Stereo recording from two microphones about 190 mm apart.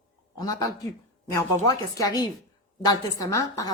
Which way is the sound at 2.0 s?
20° left (ahead or behind).